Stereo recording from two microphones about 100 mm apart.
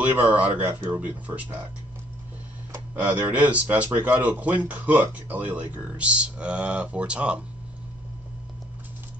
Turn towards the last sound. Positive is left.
turn(degrees=-10)  # may be behind; listen again after turning